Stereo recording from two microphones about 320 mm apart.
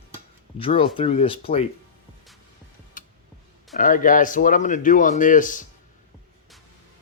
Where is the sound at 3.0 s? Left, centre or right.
Left.